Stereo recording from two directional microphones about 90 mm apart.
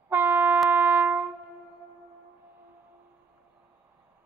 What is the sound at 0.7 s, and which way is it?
Music, 20° right (ahead or behind).